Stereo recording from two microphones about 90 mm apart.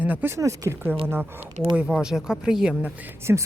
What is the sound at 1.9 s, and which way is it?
Speech, 5° right (ahead or behind).